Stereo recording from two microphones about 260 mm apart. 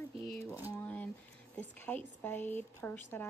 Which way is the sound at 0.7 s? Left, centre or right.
Centre.